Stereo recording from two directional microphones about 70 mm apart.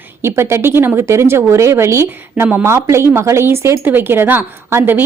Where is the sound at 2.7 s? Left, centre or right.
Right.